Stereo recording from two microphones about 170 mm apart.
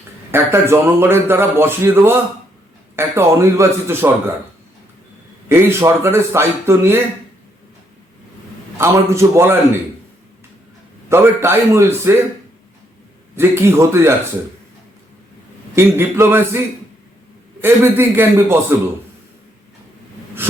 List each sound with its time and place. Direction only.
0.3 s a man's voice: 15° right (ahead or behind)
5.5 s a man's voice: 15° right (ahead or behind)
8.8 s a man's voice: 15° right (ahead or behind)
11.1 s a man's voice: 15° right (ahead or behind)
13.3 s a man's voice: 15° right (ahead or behind)
15.7 s a man's voice: 15° right (ahead or behind)
17.6 s a man's voice: 15° right (ahead or behind)
20.4 s a sound: 10° right (ahead or behind)